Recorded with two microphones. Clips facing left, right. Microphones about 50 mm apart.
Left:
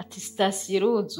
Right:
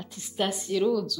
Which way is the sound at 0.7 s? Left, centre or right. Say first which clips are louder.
Right 1 dB; left.